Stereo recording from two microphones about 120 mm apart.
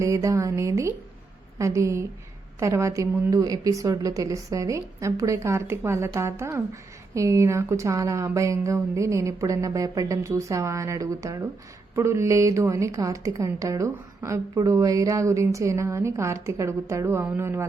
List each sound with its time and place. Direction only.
0.0 s a woman's voice: 25° right (ahead or behind)